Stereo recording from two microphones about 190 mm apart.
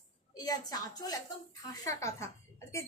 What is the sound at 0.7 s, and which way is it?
A woman's voice, 20° left (ahead or behind).